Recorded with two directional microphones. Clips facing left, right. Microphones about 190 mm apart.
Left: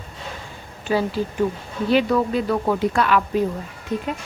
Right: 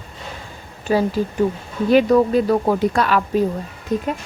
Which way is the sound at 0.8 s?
45° right (ahead or behind).